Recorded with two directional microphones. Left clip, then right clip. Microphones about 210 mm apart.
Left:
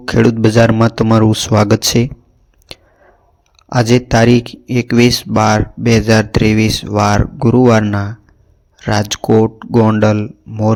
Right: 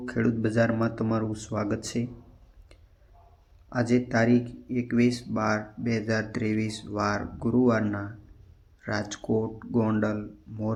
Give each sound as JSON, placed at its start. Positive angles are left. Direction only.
{"t": 0.0, "sound": "speech", "side_deg": 45}
{"t": 3.7, "sound": "speech", "side_deg": 45}